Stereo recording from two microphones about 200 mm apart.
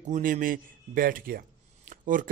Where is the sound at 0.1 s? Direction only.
45° right (ahead or behind).